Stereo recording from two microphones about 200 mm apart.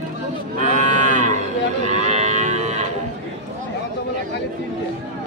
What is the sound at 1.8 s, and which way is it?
Livestock, 35° right (ahead or behind).